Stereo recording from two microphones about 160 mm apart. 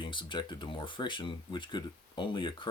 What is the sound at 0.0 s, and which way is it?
Speech, 30° left (ahead or behind).